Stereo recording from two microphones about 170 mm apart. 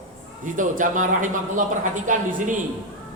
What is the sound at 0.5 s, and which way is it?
A woman's voice, 50° right (ahead or behind).